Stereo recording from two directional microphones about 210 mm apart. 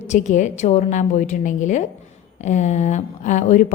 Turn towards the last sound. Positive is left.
turn(degrees=35)  # may be behind; listen again after turning